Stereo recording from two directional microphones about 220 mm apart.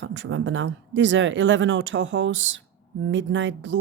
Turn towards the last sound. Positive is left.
turn(degrees=-55)  # may be behind; listen again after turning